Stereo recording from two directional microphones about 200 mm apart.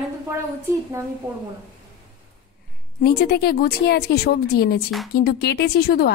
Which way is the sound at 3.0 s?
55° left (ahead or behind).